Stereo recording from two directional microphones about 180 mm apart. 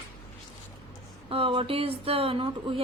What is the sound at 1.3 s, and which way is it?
Speech, 30° right (ahead or behind).